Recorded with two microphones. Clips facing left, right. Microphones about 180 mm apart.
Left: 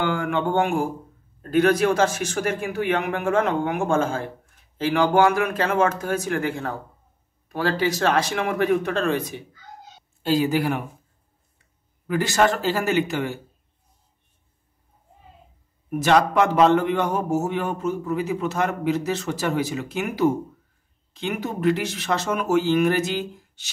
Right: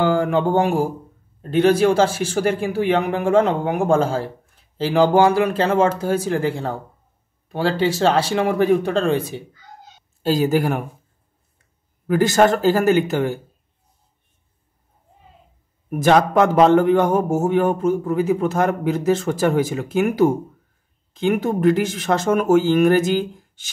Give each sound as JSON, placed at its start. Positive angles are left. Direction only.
{"t": 0.0, "sound": "speech", "side_deg": -35}
{"t": 10.2, "sound": "a man's voice", "side_deg": -40}
{"t": 12.1, "sound": "a man's voice", "side_deg": -45}
{"t": 15.9, "sound": "a man's voice", "side_deg": -50}